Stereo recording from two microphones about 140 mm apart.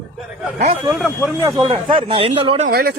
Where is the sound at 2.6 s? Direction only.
90° right.